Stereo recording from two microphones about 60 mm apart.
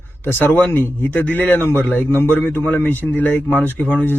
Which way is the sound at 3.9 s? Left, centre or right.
Left.